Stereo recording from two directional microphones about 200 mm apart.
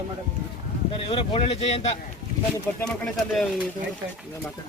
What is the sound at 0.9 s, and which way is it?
Speech, 25° left (ahead or behind).